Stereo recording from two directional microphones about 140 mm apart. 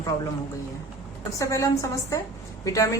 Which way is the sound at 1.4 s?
25° left (ahead or behind).